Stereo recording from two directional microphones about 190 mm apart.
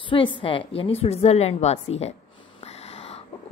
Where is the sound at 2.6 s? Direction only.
35° left (ahead or behind).